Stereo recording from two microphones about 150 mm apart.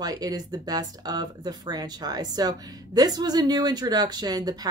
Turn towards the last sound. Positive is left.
turn(degrees=-25)  # may be behind; listen again after turning